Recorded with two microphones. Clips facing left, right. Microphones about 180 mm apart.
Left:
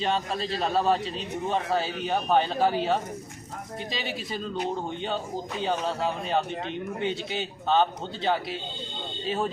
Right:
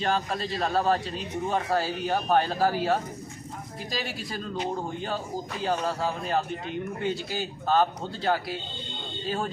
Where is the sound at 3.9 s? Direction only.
Centre (ahead or behind).